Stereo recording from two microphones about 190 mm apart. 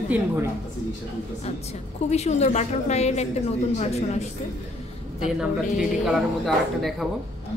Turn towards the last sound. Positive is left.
turn(degrees=0)  # may be behind; listen again after turning